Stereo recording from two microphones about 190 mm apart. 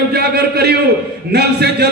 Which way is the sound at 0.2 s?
55° right (ahead or behind).